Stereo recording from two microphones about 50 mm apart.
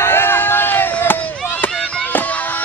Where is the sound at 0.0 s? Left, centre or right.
Left.